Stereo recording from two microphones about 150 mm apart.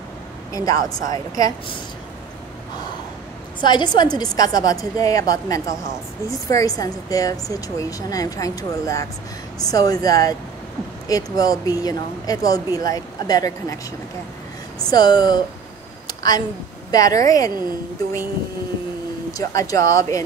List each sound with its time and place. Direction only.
0.5 s a woman's voice: 25° left (ahead or behind)
3.6 s a woman's voice: 30° left (ahead or behind)
14.9 s a woman's voice: 25° left (ahead or behind)
16.1 s a sound: 25° left (ahead or behind)
16.9 s a woman's voice: 25° left (ahead or behind)
19.3 s a woman's voice: 20° left (ahead or behind)